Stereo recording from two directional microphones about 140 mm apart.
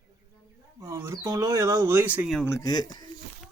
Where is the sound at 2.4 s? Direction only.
25° left (ahead or behind).